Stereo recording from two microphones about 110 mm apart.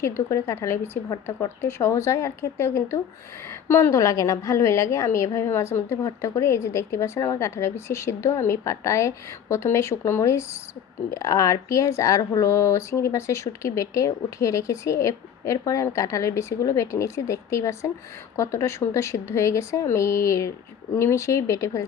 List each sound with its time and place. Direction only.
0.0 s speech: 25° left (ahead or behind)